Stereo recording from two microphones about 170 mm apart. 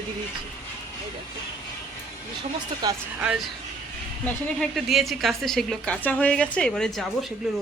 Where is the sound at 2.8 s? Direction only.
25° right (ahead or behind).